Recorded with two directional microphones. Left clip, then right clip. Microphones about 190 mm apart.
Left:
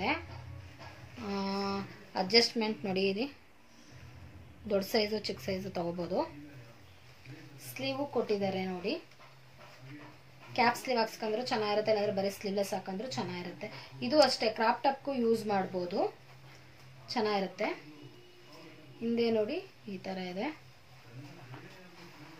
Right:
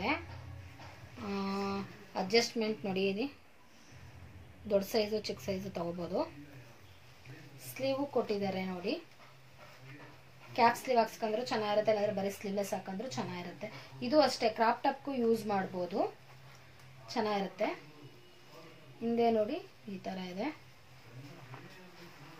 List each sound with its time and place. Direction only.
1.3 s a sound: 20° left (ahead or behind)
4.6 s a woman's voice: 25° left (ahead or behind)
7.8 s a woman's voice: 15° left (ahead or behind)
10.5 s a woman's voice: 20° left (ahead or behind)
17.1 s a woman's voice: 20° left (ahead or behind)
19.1 s a woman's voice: 15° left (ahead or behind)